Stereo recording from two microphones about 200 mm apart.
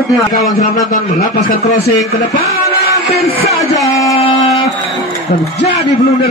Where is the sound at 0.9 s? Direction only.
40° left (ahead or behind).